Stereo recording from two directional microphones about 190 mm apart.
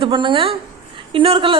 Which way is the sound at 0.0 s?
25° right (ahead or behind).